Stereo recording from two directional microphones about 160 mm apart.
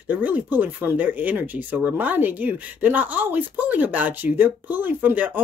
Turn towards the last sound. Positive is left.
turn(degrees=-10)  # may be behind; listen again after turning